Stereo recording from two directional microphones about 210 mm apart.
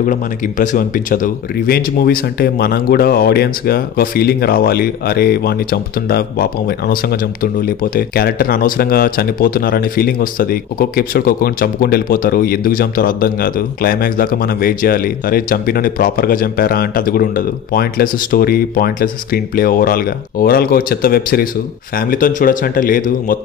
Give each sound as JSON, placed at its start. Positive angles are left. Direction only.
{"t": 0.0, "sound": "speech", "side_deg": 40}